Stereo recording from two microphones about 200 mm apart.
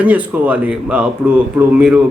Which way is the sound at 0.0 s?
5° right (ahead or behind).